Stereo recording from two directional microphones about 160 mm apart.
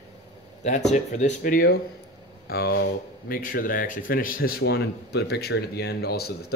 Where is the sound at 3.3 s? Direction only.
60° left (ahead or behind).